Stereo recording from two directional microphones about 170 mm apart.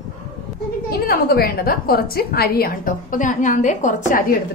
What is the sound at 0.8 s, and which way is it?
A woman's voice, 60° left (ahead or behind).